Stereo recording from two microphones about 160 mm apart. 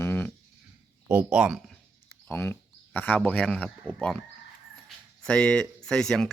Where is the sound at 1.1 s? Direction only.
5° right (ahead or behind).